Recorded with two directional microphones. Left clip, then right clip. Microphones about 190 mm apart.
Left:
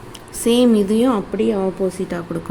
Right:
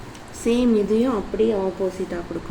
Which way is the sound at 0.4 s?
60° left (ahead or behind).